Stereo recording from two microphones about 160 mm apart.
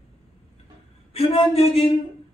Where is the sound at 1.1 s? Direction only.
35° left (ahead or behind).